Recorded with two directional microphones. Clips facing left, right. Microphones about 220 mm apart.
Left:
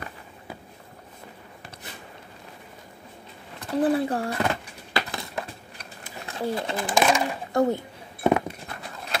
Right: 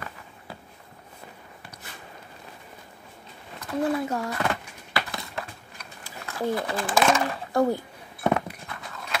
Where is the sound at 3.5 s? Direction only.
30° left (ahead or behind).